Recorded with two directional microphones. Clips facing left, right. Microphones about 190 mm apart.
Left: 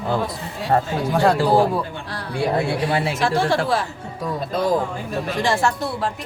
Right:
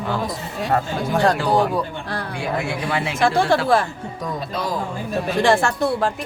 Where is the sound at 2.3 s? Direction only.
35° left (ahead or behind).